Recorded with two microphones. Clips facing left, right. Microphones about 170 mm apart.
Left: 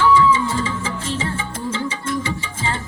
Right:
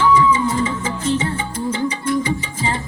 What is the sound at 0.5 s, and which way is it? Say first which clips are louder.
Music: right 3 dB; 30° right (ahead or behind).